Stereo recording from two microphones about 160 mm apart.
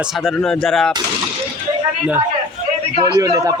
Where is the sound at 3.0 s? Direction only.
20° right (ahead or behind).